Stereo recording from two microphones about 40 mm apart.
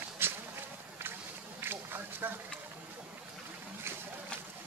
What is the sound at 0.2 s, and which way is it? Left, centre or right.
Walk, right.